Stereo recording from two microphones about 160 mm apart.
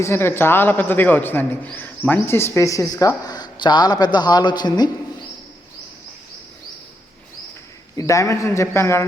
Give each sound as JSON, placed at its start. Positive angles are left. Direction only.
{"t": 0.0, "sound": "a man's voice", "side_deg": 15}
{"t": 7.9, "sound": "a man's voice", "side_deg": 20}